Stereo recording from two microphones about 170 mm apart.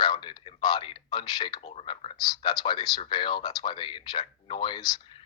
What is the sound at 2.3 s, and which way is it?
Speech, 25° left (ahead or behind).